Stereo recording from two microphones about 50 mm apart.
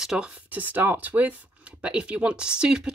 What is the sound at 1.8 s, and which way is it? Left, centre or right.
Speech, right.